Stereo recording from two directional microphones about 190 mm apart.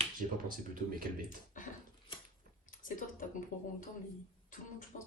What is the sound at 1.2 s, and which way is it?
Speech, 45° left (ahead or behind).